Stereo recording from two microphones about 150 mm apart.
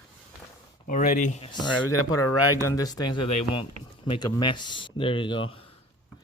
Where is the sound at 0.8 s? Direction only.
60° left (ahead or behind).